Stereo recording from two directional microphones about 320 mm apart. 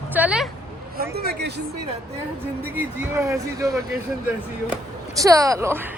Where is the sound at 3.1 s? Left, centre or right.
Centre.